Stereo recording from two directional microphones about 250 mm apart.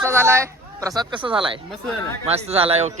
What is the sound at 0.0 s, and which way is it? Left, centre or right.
A man's voice, centre.